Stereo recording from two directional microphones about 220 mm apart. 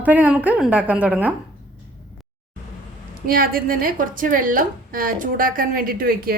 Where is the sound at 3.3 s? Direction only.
40° right (ahead or behind).